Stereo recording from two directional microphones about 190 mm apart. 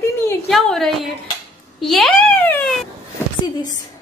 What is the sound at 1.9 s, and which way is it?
Speech, 5° left (ahead or behind).